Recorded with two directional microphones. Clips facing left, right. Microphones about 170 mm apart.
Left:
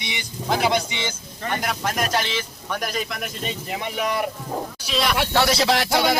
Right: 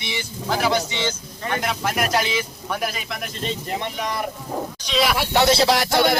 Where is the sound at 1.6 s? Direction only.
5° right (ahead or behind).